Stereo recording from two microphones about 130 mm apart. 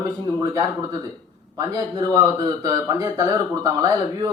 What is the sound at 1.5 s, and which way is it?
Speech, 30° right (ahead or behind).